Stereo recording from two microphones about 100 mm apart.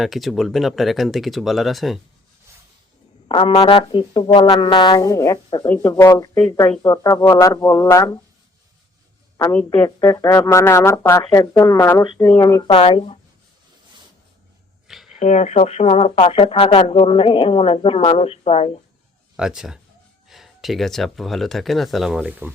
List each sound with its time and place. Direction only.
0.0 s speech: centre (ahead or behind)
3.2 s a woman's voice: 70° left (ahead or behind); by 5.4 s 30° left (ahead or behind)
5.6 s speech: 20° left (ahead or behind)
5.9 s speech: 30° left (ahead or behind)
9.7 s speech: 20° left (ahead or behind)
12.6 s speech: 60° left (ahead or behind)
14.8 s a sound: 5° right (ahead or behind)
15.4 s speech: 90° left
16.2 s speech: 70° left (ahead or behind); by 18.7 s 90° left
19.4 s speech: 5° right (ahead or behind)
22.3 s speech: 15° right (ahead or behind)